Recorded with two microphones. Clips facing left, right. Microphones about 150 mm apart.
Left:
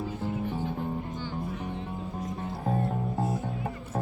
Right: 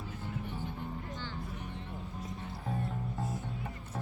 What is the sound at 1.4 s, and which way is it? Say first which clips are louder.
Music: left 8 dB; 90° left.